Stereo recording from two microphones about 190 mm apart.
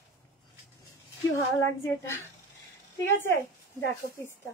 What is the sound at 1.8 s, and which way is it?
Speech, 15° left (ahead or behind).